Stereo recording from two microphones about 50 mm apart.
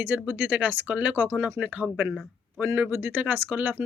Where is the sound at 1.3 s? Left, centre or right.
Right.